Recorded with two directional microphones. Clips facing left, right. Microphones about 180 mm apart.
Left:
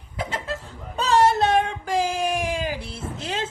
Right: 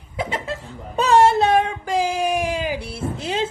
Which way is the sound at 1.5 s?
5° right (ahead or behind).